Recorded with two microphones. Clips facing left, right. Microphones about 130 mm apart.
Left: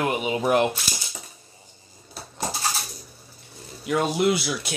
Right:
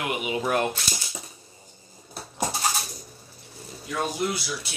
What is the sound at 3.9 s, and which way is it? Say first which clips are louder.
Speech: left 6 dB; 75° left (ahead or behind).